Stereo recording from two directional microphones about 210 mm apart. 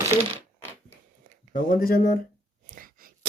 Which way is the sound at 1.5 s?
40° left (ahead or behind).